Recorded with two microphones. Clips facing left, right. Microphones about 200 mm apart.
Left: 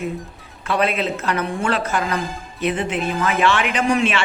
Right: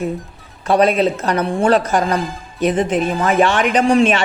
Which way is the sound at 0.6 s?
40° right (ahead or behind).